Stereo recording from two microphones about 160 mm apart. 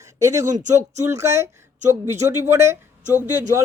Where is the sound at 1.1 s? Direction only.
20° right (ahead or behind).